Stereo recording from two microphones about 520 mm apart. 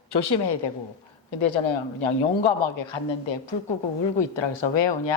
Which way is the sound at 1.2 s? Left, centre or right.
Left.